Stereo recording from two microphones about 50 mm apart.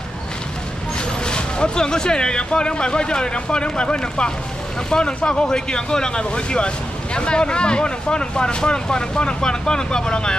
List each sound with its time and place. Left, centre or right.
1.2 s speech: centre